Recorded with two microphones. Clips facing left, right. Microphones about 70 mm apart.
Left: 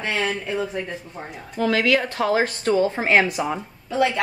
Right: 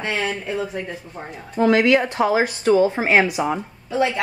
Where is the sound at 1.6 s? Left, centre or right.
Right.